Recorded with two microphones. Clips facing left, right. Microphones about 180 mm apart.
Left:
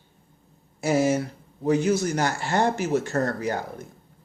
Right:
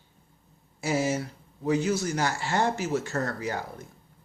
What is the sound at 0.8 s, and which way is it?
Speech, 55° left (ahead or behind).